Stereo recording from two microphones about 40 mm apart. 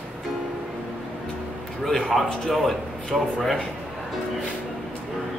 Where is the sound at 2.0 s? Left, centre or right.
Centre.